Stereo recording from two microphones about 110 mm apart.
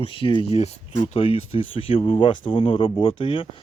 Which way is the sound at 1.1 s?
70° left (ahead or behind).